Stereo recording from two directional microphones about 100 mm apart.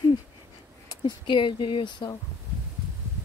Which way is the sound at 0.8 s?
50° left (ahead or behind).